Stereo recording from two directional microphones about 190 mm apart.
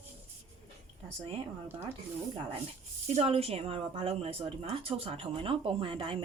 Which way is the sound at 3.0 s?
30° right (ahead or behind).